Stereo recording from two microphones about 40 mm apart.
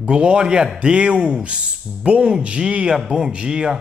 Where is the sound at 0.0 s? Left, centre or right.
Right.